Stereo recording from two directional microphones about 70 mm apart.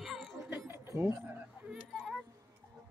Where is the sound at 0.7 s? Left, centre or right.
Right.